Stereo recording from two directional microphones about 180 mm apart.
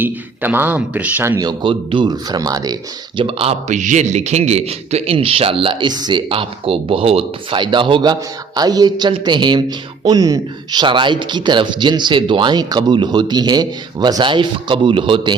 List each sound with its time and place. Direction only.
0.0 s speech: 10° right (ahead or behind)
1.4 s a man's voice: 25° right (ahead or behind)
3.2 s a man's voice: 30° right (ahead or behind)